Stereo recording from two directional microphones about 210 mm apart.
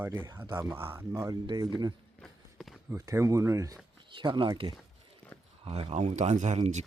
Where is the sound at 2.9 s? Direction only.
15° right (ahead or behind).